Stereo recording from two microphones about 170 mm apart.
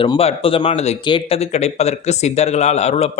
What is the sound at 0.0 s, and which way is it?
Speech, 35° left (ahead or behind).